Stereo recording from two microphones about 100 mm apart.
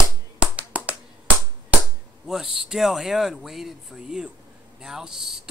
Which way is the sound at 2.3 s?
5° right (ahead or behind).